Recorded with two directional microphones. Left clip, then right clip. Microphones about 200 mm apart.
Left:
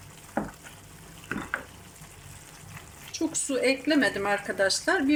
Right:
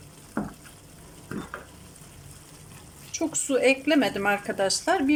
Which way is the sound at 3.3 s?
10° right (ahead or behind).